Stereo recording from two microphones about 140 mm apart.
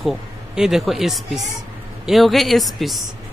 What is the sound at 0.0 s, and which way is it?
Speech, centre (ahead or behind).